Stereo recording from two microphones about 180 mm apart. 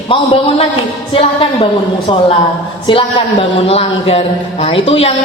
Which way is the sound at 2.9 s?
30° left (ahead or behind).